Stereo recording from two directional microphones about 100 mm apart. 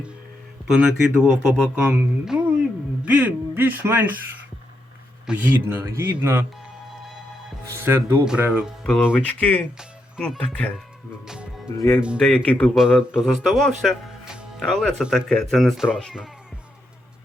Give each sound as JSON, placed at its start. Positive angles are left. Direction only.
{"t": 0.7, "sound": "speech", "side_deg": -5}
{"t": 5.2, "sound": "speech", "side_deg": -15}
{"t": 7.7, "sound": "speech", "side_deg": -25}
{"t": 8.2, "sound": "speech", "side_deg": -5}
{"t": 9.2, "sound": "speech", "side_deg": 15}
{"t": 11.3, "sound": "music", "side_deg": -10}
{"t": 11.9, "sound": "speech", "side_deg": -10}
{"t": 12.2, "sound": "speech", "side_deg": 10}
{"t": 12.7, "sound": "speech", "side_deg": -5}
{"t": 14.6, "sound": "speech", "side_deg": 5}